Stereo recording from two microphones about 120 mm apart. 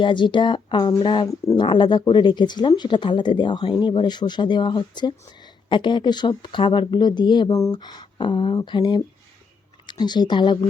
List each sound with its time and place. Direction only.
0.0 s speech: 40° left (ahead or behind)